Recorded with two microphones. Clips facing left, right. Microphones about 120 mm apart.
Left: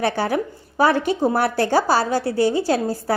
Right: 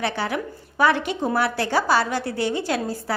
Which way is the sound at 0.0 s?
40° left (ahead or behind).